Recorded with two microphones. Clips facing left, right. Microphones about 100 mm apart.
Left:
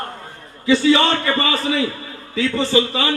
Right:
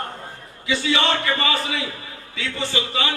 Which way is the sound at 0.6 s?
35° left (ahead or behind).